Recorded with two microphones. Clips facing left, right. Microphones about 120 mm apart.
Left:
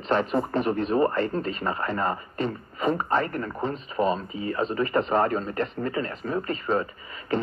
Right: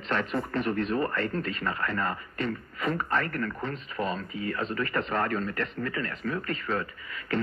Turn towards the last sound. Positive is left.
turn(degrees=30)  # may be behind; listen again after turning